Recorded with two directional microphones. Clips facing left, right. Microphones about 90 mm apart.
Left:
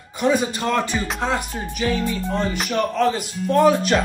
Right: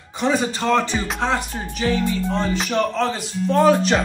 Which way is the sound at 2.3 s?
10° left (ahead or behind).